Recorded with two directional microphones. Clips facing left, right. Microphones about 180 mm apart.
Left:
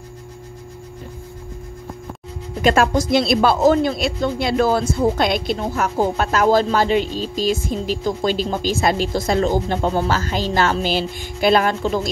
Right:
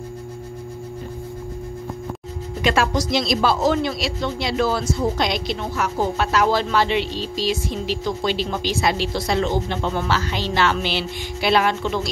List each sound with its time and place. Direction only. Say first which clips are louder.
2.6 s speech: left 4 dB; 50° left (ahead or behind)